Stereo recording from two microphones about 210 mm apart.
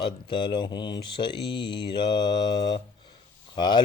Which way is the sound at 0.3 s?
20° left (ahead or behind).